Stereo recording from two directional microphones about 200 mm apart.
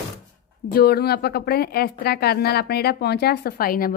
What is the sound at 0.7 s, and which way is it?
Speech, 50° left (ahead or behind).